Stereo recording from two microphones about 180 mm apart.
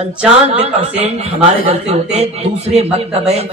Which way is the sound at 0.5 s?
35° right (ahead or behind).